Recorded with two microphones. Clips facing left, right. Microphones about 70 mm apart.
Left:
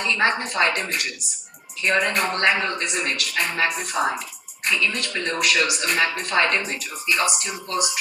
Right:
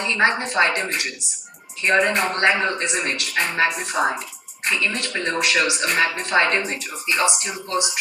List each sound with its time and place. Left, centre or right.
0.0 s speech: right